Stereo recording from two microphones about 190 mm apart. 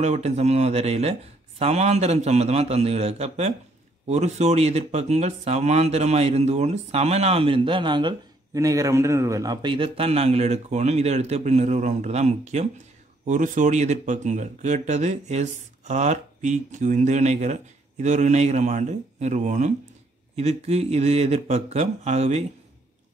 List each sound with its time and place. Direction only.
0.0 s speech: 35° right (ahead or behind)